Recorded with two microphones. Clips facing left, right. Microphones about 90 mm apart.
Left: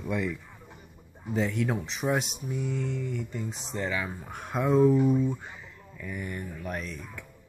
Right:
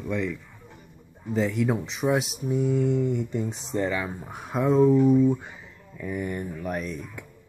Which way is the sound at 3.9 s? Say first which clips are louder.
Right 3 dB; 10° right (ahead or behind).